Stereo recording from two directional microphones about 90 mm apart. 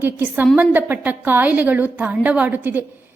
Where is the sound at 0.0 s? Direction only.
20° right (ahead or behind).